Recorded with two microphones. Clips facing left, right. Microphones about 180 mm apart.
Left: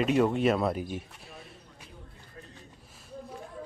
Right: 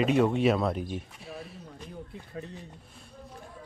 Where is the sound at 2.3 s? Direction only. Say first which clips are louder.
Right 10 dB; 80° right.